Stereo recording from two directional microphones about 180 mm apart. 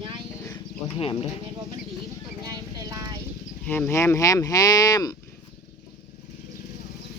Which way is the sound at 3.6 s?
10° left (ahead or behind).